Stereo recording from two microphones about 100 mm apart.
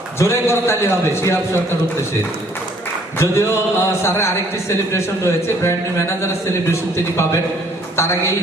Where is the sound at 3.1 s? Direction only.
30° left (ahead or behind).